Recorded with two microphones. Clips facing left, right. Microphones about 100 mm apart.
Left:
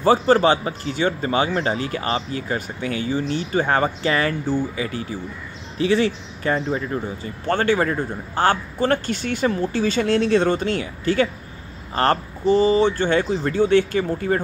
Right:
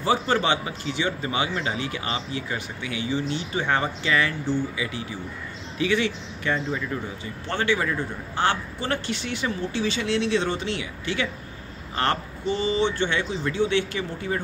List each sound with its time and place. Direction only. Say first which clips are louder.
0.0 s a man's voice: left 7 dB; 40° left (ahead or behind)